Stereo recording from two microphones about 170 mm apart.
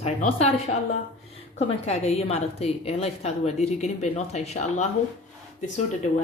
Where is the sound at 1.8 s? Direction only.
40° left (ahead or behind).